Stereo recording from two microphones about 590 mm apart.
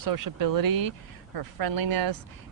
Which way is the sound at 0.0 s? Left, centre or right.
Right.